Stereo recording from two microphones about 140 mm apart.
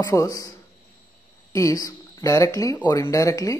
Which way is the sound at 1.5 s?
25° left (ahead or behind).